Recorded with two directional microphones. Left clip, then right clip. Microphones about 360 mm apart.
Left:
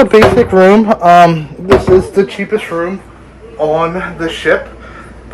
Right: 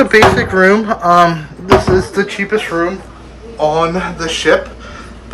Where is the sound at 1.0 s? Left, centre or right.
Centre.